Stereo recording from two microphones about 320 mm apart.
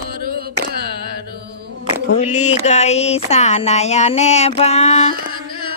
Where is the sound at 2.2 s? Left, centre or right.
Left.